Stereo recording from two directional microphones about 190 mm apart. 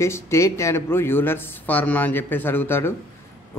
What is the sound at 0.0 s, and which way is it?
A man's voice, 15° left (ahead or behind).